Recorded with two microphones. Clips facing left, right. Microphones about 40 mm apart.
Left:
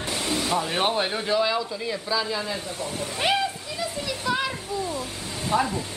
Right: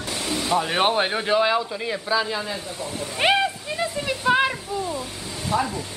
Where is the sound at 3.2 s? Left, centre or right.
Right.